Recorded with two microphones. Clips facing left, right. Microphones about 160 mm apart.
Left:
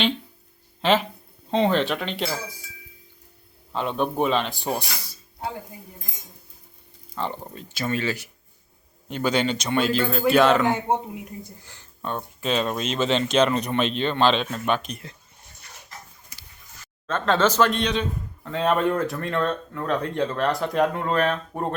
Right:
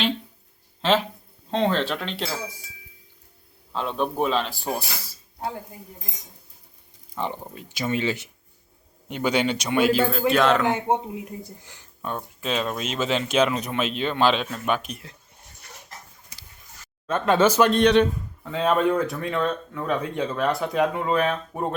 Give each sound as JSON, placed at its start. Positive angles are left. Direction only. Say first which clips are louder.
{"t": 0.8, "sound": "speech", "louder": "left 1 dB", "side_deg": 0}
{"t": 3.7, "sound": "speech", "louder": "left 1 dB", "side_deg": 0}
{"t": 7.2, "sound": "speech", "louder": "even", "side_deg": -10}
{"t": 10.8, "sound": "speech", "louder": "right 1 dB", "side_deg": -10}
{"t": 17.1, "sound": "speech", "louder": "right 2 dB", "side_deg": -10}